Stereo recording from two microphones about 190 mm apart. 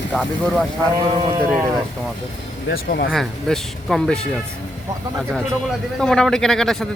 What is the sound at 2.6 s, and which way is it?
Speech, 55° left (ahead or behind).